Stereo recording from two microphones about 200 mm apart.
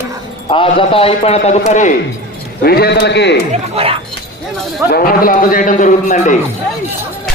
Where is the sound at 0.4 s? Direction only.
25° left (ahead or behind).